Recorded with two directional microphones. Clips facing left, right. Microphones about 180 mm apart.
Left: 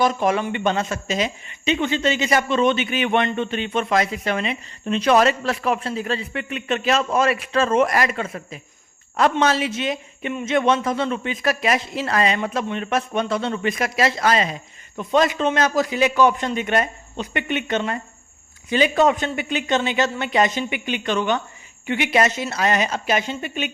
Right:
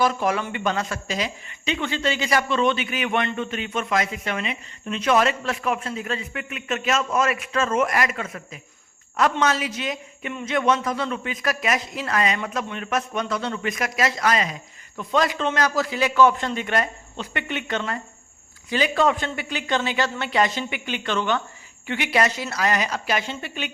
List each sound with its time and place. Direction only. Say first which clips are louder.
0.0 s speech: left 3 dB; 20° left (ahead or behind)